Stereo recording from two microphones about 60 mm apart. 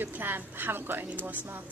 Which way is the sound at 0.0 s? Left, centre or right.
Right.